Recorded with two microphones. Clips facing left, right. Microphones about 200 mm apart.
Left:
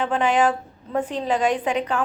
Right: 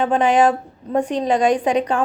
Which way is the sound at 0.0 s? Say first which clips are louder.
Right 4 dB; 40° right (ahead or behind).